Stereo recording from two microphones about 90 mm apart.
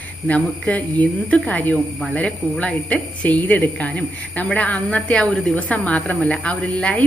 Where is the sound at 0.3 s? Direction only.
15° left (ahead or behind).